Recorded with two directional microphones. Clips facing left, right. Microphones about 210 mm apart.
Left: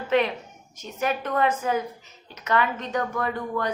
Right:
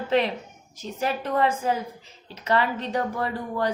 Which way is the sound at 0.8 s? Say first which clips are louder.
Even; 30° right (ahead or behind).